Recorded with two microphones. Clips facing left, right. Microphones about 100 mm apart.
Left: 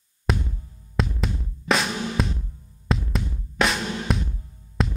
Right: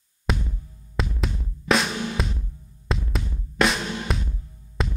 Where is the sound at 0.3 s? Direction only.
Centre (ahead or behind).